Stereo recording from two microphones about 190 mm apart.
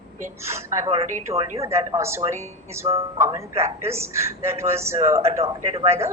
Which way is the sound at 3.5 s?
35° right (ahead or behind).